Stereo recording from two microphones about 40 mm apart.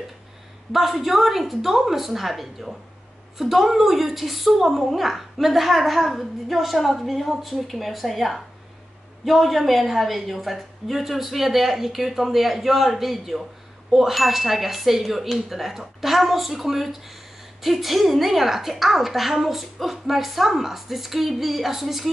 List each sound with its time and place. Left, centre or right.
0.7 s a woman's voice: centre